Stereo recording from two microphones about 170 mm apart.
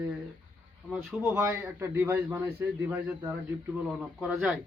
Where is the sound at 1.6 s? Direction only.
10° right (ahead or behind).